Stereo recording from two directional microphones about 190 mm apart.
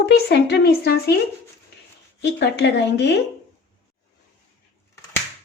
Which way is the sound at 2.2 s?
65° left (ahead or behind).